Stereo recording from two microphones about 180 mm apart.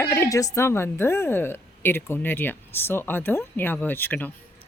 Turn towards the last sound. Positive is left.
turn(degrees=10)  # may be behind; listen again after turning